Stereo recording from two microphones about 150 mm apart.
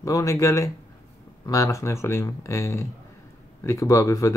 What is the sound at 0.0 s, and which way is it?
Speech, 20° left (ahead or behind).